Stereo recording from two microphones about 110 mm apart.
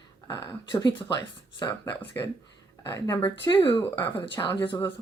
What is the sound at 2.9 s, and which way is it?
Speech, 30° left (ahead or behind).